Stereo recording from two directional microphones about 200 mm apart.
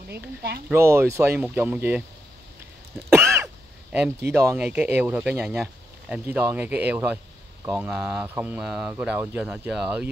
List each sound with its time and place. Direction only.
0.1 s speech: 55° right (ahead or behind)
0.7 s speech: 10° right (ahead or behind)
3.1 s throat clearing: 15° right (ahead or behind)
4.3 s speech: 10° right (ahead or behind)